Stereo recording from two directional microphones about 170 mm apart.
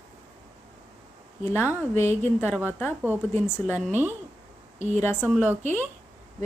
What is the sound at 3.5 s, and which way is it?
Speech, 15° left (ahead or behind).